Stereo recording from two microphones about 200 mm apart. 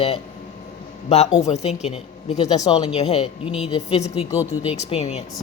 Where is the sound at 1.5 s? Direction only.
35° left (ahead or behind).